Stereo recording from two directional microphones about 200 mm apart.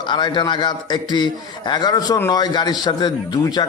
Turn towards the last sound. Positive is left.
turn(degrees=20)  # may be behind; listen again after turning